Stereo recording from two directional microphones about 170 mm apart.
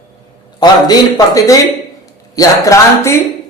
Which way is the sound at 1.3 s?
20° left (ahead or behind).